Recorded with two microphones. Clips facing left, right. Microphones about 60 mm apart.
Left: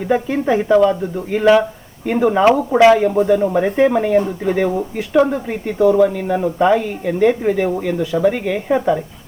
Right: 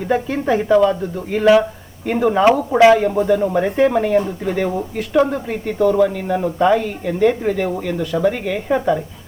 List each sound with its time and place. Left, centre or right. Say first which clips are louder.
0.1 s speech: left 1 dB; centre